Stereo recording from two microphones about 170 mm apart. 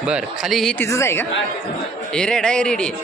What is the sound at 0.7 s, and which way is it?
Speech, 15° left (ahead or behind).